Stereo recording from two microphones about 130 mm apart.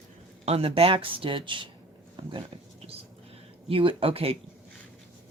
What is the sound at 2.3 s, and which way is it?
Dog, 40° right (ahead or behind).